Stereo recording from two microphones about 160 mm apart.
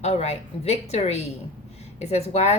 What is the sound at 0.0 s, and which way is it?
A woman's voice, 40° left (ahead or behind).